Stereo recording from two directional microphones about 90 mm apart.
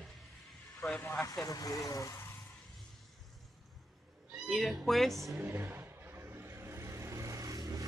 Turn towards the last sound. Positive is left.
turn(degrees=-45)  # may be behind; listen again after turning